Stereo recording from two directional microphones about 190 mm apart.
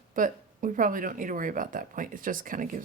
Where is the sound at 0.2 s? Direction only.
45° right (ahead or behind).